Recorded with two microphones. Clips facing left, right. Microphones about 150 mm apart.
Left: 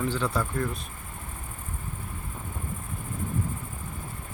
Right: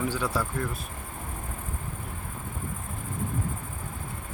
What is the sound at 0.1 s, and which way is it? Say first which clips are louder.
Speech: left 1 dB; 10° right (ahead or behind).